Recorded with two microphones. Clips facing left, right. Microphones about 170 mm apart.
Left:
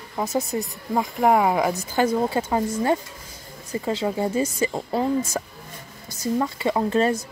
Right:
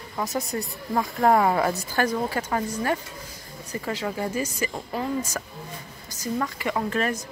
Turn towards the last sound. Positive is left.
turn(degrees=25)  # may be behind; listen again after turning